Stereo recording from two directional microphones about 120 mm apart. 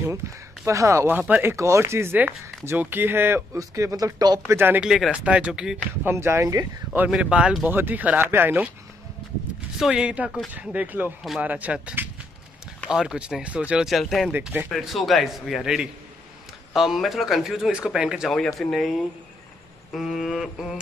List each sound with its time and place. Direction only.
0.7 s speech: 25° right (ahead or behind)
1.1 s speech: 15° right (ahead or behind); by 4.4 s 35° right (ahead or behind)
4.5 s speech: 20° right (ahead or behind)
4.8 s speech: 5° right (ahead or behind)
6.0 s speech: 20° right (ahead or behind)
7.1 s speech: 5° right (ahead or behind)
9.8 s speech: 5° right (ahead or behind)